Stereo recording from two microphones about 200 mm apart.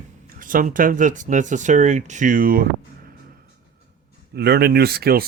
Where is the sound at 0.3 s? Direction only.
40° right (ahead or behind).